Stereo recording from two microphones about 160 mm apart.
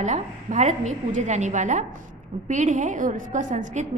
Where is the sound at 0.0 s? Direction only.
50° right (ahead or behind).